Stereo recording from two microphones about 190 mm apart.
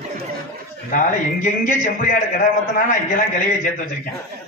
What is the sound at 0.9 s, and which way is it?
A man's voice, 45° left (ahead or behind).